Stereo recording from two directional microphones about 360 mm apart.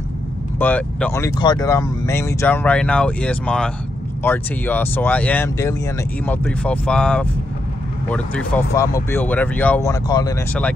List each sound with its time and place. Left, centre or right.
0.6 s speech: centre